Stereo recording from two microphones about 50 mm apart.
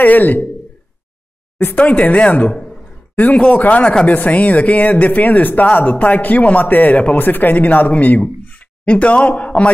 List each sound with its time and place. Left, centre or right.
0.0 s speech: left
1.8 s speech: left
2.5 s a sound: centre
3.3 s speech: left